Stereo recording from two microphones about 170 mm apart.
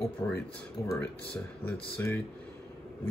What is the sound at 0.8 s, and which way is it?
Speech, 15° left (ahead or behind).